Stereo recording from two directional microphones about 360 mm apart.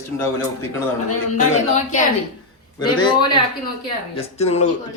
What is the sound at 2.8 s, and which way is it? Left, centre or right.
Speech, centre.